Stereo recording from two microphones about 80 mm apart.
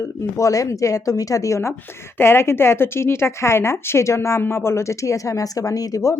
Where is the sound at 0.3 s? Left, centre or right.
Left.